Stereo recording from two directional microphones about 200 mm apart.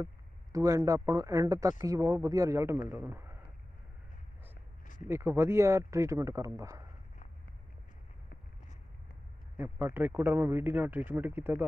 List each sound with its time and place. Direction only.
0.0 s speech: 15° right (ahead or behind)
5.0 s speech: 10° right (ahead or behind)
9.6 s speech: 10° right (ahead or behind)